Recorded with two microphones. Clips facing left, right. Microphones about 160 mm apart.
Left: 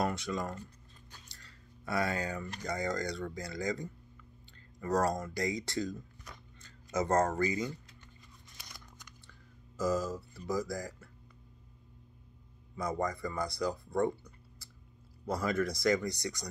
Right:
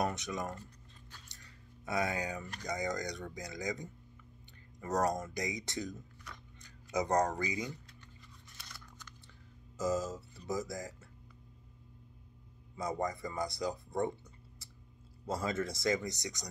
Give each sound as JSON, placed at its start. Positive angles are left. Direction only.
{"t": 0.0, "sound": "speech", "side_deg": -20}
{"t": 1.3, "sound": "a sound", "side_deg": -20}
{"t": 2.6, "sound": "speech", "side_deg": -15}
{"t": 6.6, "sound": "a sound", "side_deg": -15}
{"t": 7.3, "sound": "speech", "side_deg": -15}
{"t": 8.5, "sound": "scissors", "side_deg": 15}
{"t": 9.8, "sound": "speech", "side_deg": -20}
{"t": 12.7, "sound": "speech", "side_deg": -20}
{"t": 15.2, "sound": "speech", "side_deg": -25}